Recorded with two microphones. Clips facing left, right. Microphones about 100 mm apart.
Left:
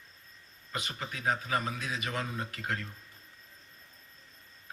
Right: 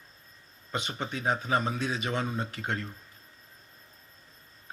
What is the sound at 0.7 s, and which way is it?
Speech, 25° right (ahead or behind).